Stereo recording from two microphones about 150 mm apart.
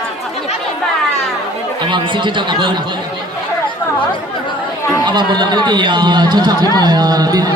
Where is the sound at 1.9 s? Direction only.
30° right (ahead or behind).